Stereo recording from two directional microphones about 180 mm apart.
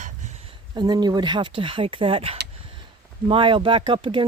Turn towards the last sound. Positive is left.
turn(degrees=-30)  # may be behind; listen again after turning